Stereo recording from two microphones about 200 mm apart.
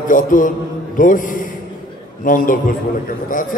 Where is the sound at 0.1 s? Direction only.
40° left (ahead or behind).